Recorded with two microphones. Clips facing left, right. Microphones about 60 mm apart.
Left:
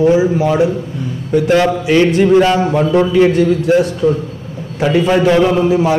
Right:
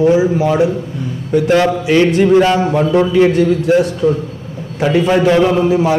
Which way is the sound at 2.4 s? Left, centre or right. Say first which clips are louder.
Even; right.